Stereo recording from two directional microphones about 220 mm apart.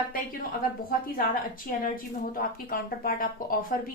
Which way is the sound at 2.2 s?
40° left (ahead or behind).